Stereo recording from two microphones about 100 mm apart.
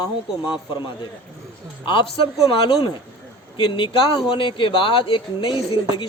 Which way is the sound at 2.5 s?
60° left (ahead or behind).